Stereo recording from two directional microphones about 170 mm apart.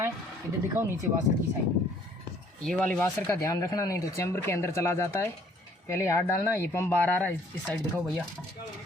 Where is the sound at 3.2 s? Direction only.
20° left (ahead or behind).